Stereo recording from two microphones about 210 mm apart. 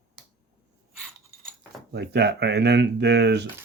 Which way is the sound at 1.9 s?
50° right (ahead or behind).